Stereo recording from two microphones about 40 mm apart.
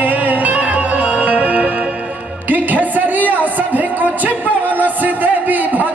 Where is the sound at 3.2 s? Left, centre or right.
Right.